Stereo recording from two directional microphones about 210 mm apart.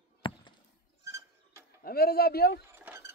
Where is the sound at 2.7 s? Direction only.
10° right (ahead or behind).